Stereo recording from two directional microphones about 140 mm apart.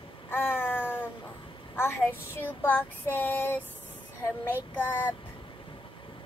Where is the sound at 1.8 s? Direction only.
15° left (ahead or behind).